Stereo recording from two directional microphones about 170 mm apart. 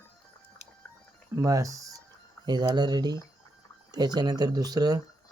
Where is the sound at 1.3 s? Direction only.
20° right (ahead or behind).